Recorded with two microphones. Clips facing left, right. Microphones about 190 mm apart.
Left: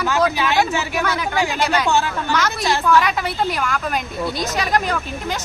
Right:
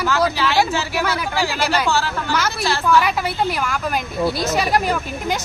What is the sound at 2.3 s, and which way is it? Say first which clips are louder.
A woman's voice: left 1 dB; 10° right (ahead or behind).